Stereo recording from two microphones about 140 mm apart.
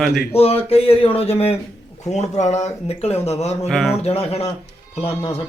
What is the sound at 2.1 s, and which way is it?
Speech, 55° left (ahead or behind).